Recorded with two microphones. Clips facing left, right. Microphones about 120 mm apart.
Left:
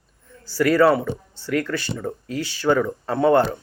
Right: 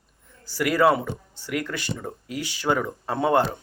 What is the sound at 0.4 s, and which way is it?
Speech, 15° right (ahead or behind).